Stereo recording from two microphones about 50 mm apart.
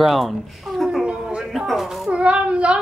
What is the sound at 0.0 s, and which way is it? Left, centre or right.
Speech, centre.